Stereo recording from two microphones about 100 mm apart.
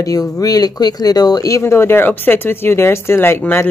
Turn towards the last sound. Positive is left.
turn(degrees=20)  # may be behind; listen again after turning